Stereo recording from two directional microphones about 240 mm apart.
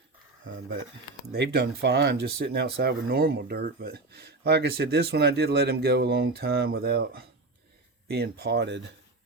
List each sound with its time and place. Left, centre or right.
0.4 s speech: right
1.3 s speech: right